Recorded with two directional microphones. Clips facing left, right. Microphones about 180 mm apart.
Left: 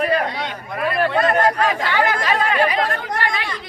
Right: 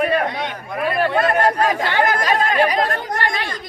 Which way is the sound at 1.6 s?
40° right (ahead or behind).